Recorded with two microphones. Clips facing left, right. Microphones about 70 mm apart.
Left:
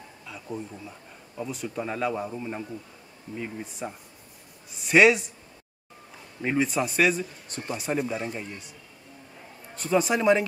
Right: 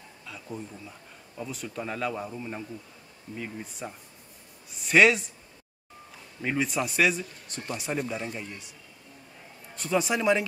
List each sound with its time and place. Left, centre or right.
0.2 s speech: centre
6.4 s speech: centre
9.8 s speech: centre